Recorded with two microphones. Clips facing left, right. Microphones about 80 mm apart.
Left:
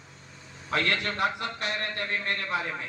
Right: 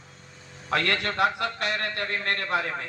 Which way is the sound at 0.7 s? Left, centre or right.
Right.